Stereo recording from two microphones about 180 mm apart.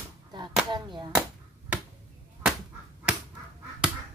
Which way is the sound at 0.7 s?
25° right (ahead or behind).